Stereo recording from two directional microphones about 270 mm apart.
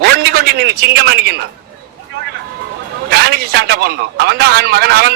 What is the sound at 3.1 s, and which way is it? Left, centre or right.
Speech, right.